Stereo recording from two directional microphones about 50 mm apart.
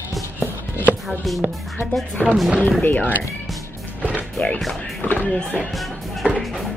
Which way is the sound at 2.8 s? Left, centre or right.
Left.